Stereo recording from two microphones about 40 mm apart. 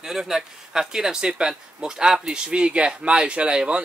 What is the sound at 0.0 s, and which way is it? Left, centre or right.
Speech, centre.